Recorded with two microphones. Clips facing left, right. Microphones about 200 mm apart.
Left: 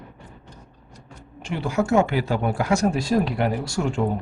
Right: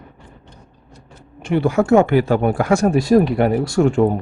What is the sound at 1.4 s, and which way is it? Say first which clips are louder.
Speech: right 7 dB; 60° right (ahead or behind).